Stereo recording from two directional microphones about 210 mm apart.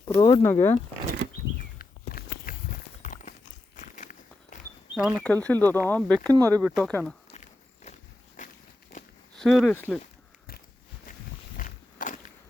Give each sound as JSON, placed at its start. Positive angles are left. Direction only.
{"t": 0.1, "sound": "speech", "side_deg": 20}
{"t": 1.8, "sound": "walk", "side_deg": 45}
{"t": 4.9, "sound": "speech", "side_deg": 0}
{"t": 5.3, "sound": "speech", "side_deg": 10}
{"t": 6.2, "sound": "speech", "side_deg": -15}
{"t": 6.6, "sound": "speech", "side_deg": 0}
{"t": 8.4, "sound": "walk", "side_deg": 35}
{"t": 8.9, "sound": "a sound", "side_deg": 35}
{"t": 9.3, "sound": "speech", "side_deg": 0}
{"t": 11.5, "sound": "walk", "side_deg": 40}